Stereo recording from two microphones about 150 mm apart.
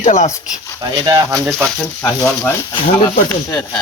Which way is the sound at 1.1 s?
25° right (ahead or behind).